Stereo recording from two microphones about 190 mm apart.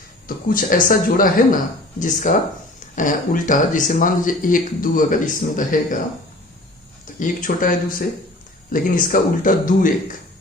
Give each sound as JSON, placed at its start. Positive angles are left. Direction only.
{"t": 0.3, "sound": "speech", "side_deg": 45}
{"t": 7.2, "sound": "speech", "side_deg": 45}